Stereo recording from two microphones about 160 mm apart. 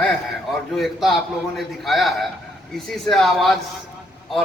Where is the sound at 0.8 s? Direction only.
Centre (ahead or behind).